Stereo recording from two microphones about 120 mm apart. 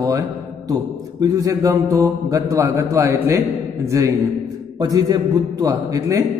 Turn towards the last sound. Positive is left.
turn(degrees=-30)  # may be behind; listen again after turning